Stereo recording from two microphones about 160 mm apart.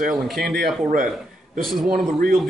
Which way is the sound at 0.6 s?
65° right (ahead or behind).